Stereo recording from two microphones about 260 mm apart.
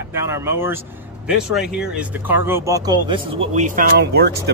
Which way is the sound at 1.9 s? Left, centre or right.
Centre.